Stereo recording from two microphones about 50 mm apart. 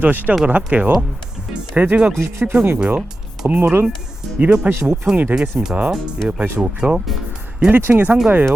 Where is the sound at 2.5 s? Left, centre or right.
Right.